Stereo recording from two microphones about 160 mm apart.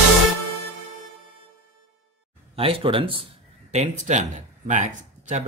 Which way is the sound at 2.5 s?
35° right (ahead or behind).